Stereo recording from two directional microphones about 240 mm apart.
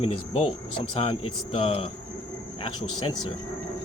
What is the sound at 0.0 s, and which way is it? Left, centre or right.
Speech, left.